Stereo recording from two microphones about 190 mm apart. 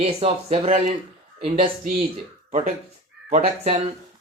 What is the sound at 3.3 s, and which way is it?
Speech, 35° right (ahead or behind).